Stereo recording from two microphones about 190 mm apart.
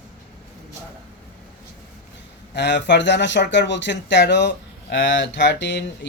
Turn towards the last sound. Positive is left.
turn(degrees=70)  # may be behind; listen again after turning